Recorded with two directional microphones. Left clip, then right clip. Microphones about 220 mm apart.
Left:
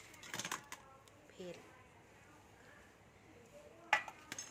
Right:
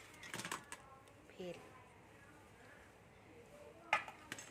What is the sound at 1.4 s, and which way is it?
Speech, centre (ahead or behind).